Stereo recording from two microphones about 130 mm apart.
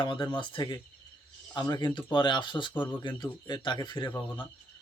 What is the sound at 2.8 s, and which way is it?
Speech, 15° left (ahead or behind).